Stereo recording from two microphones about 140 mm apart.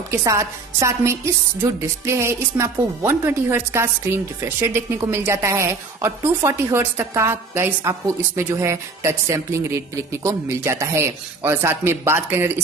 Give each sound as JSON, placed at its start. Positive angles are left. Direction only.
{"t": 0.1, "sound": "speech", "side_deg": -20}